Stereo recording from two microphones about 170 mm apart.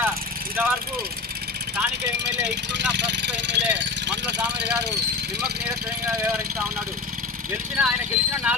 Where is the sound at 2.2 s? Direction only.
90° right.